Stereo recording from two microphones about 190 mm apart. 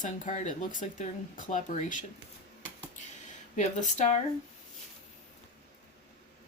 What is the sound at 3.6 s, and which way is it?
Speech, 40° left (ahead or behind).